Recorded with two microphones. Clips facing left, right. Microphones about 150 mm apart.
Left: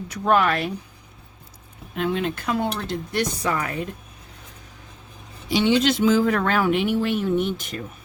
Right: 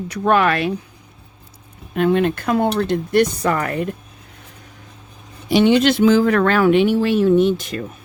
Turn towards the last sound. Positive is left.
turn(degrees=-90)